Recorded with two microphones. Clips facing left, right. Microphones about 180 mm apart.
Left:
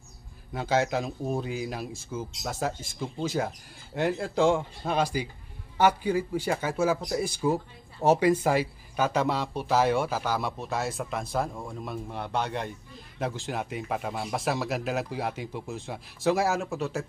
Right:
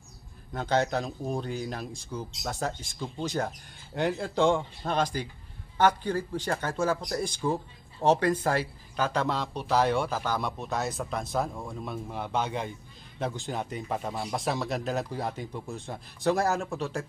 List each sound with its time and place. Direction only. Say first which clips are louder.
0.5 s speech: left 1 dB; 5° left (ahead or behind)